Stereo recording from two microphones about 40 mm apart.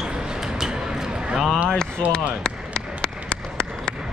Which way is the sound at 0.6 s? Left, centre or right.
Centre.